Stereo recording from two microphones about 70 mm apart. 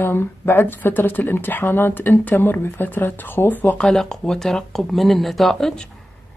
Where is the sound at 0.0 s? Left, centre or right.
Left.